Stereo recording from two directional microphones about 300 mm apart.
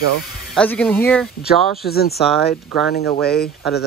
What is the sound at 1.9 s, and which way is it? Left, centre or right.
Speech, left.